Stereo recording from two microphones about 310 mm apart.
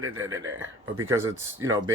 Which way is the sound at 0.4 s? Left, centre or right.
Right.